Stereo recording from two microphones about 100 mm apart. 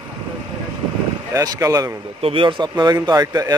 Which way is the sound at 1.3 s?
35° right (ahead or behind).